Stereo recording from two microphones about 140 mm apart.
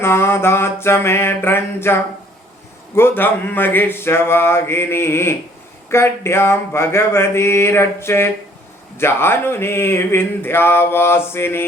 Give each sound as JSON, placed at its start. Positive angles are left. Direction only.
{"t": 0.0, "sound": "speech", "side_deg": 15}